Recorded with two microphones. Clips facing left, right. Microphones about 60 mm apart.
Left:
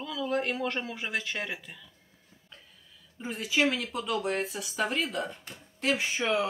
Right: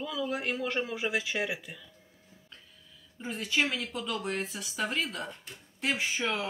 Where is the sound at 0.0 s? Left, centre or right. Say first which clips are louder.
Left 2 dB; centre.